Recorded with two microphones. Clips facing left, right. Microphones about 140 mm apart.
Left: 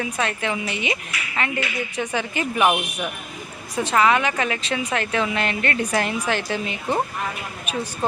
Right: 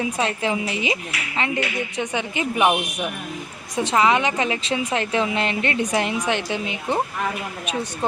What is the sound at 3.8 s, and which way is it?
A woman's voice, 25° right (ahead or behind).